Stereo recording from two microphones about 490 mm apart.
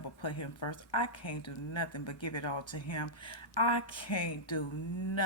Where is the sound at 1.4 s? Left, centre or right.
Left.